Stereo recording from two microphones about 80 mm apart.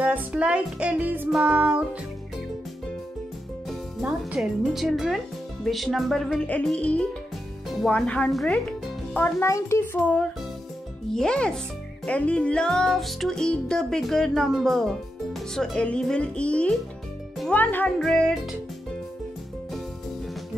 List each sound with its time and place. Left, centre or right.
0.0 s music: centre
4.0 s speech: centre
6.4 s music: centre
9.4 s a child's voice: left
9.9 s speech: left
11.1 s music: centre
17.5 s speech: left
17.9 s music: centre